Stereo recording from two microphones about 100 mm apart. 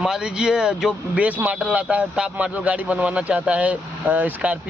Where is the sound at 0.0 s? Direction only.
5° right (ahead or behind).